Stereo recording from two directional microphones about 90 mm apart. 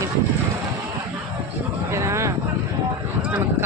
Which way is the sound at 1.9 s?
30° right (ahead or behind).